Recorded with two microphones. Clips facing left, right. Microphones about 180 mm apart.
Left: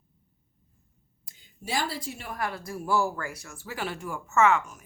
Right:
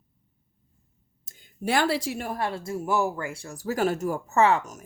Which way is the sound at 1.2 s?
50° right (ahead or behind).